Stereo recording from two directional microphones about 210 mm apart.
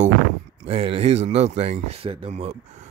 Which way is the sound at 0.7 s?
30° right (ahead or behind).